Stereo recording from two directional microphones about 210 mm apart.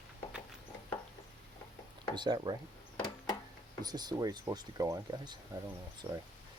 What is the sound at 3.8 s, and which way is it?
Speech, 20° right (ahead or behind).